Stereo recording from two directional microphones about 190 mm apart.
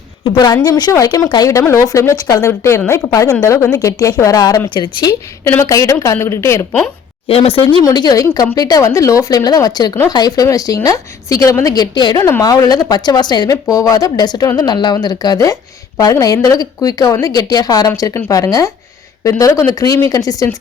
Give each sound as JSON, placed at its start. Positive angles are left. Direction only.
{"t": 0.3, "sound": "a woman's voice", "side_deg": 20}
{"t": 7.3, "sound": "a woman's voice", "side_deg": 30}